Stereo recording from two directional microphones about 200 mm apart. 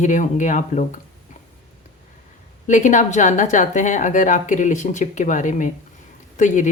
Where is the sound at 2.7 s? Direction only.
40° left (ahead or behind).